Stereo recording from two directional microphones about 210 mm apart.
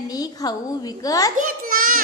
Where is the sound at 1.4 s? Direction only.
40° right (ahead or behind).